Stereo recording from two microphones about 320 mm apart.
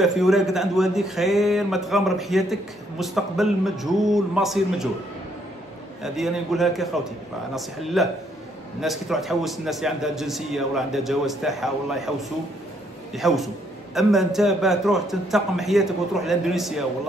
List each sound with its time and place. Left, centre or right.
0.0 s a man's voice: centre
6.0 s a man's voice: centre